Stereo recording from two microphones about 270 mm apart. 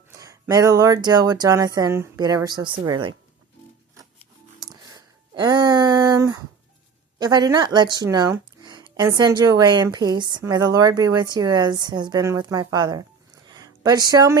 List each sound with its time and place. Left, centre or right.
0.1 s speech: centre
4.7 s a sound: centre
7.2 s speech: centre